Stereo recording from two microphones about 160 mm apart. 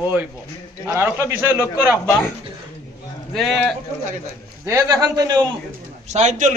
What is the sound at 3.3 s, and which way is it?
Speech, centre (ahead or behind).